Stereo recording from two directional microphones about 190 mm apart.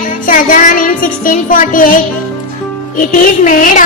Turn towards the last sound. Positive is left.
turn(degrees=45)  # may be behind; listen again after turning